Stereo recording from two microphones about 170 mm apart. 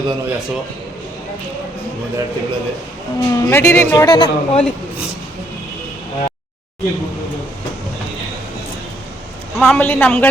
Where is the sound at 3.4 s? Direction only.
15° left (ahead or behind).